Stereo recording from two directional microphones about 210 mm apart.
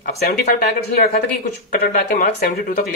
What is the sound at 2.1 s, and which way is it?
Speech, 40° left (ahead or behind).